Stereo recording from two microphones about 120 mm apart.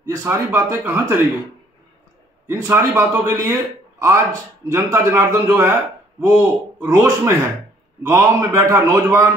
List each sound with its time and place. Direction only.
0.1 s a man's voice: 20° right (ahead or behind)
2.4 s a man's voice: 20° right (ahead or behind)
4.6 s a man's voice: 20° right (ahead or behind)